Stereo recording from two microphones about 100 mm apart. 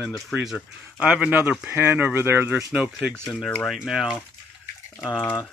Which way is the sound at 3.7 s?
5° right (ahead or behind).